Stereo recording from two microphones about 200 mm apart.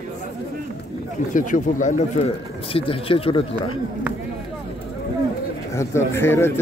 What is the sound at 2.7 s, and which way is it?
Speech, 25° left (ahead or behind).